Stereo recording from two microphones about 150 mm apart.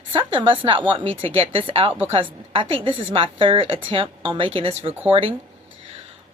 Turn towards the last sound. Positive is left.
turn(degrees=-40)  # may be behind; listen again after turning